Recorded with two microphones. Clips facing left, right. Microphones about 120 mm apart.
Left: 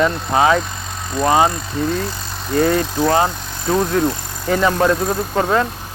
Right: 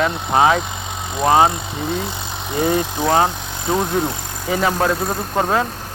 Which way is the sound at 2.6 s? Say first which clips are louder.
Left 3 dB; 20° right (ahead or behind).